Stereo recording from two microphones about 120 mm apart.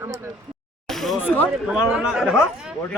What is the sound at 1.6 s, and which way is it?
Speech, 5° right (ahead or behind).